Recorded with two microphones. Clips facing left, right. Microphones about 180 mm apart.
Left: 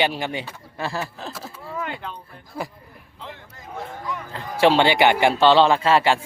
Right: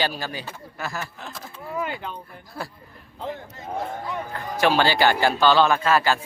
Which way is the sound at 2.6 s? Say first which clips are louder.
Left 3 dB; 20° left (ahead or behind).